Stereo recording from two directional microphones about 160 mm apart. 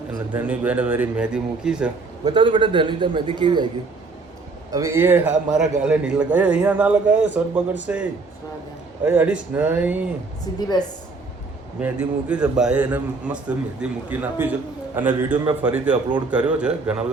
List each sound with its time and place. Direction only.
0.3 s a man's voice: 10° right (ahead or behind)
2.2 s a man's voice: 30° right (ahead or behind)
4.7 s a man's voice: 20° right (ahead or behind)
9.0 s a man's voice: 10° right (ahead or behind)
11.8 s a man's voice: 10° right (ahead or behind)